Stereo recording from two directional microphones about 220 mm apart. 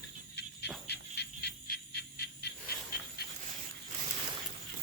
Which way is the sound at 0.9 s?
50° left (ahead or behind).